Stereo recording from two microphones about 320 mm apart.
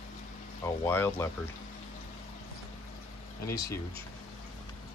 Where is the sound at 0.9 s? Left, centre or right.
Centre.